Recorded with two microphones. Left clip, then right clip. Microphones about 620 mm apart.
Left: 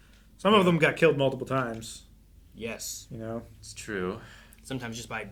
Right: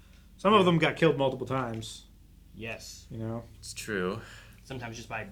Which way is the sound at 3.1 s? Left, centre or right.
Right.